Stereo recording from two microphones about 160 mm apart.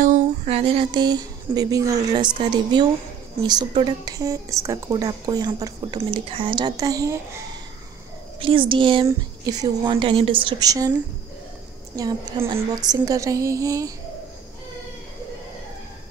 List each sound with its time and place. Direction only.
0.0 s speech: 45° right (ahead or behind); by 5.9 s 25° right (ahead or behind)
5.9 s speech: 35° right (ahead or behind)
8.4 s a woman's voice: 35° right (ahead or behind)
11.9 s speech: 25° right (ahead or behind)